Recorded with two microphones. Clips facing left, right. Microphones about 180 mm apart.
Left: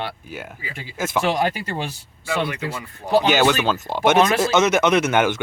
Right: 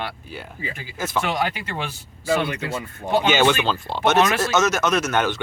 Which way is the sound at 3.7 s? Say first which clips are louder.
Left 2 dB; 10° left (ahead or behind).